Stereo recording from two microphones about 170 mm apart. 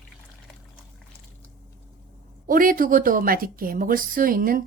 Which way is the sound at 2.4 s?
55° right (ahead or behind).